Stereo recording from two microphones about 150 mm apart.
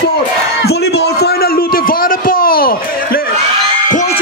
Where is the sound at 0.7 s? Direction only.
90° left.